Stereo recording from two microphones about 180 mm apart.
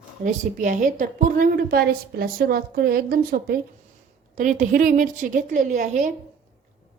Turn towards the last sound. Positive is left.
turn(degrees=-45)  # may be behind; listen again after turning